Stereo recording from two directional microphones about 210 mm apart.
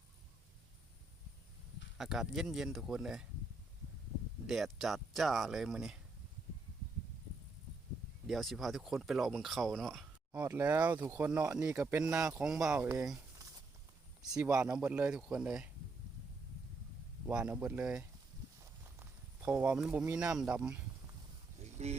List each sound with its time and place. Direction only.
2.0 s speech: centre (ahead or behind)
4.4 s speech: centre (ahead or behind)
8.3 s speech: centre (ahead or behind)
17.2 s speech: 5° right (ahead or behind)
21.8 s speech: 30° right (ahead or behind)